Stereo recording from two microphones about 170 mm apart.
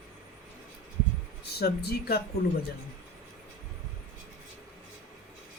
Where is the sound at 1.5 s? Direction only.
70° left (ahead or behind).